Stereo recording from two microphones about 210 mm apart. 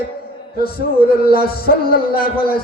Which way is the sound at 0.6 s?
45° left (ahead or behind).